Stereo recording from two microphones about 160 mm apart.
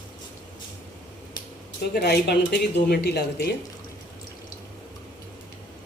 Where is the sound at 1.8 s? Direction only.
90° left.